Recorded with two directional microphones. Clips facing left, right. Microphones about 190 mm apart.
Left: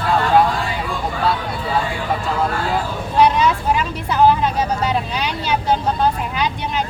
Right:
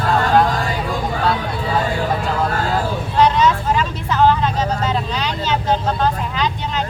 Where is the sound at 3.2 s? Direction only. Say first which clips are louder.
Even; 10° left (ahead or behind).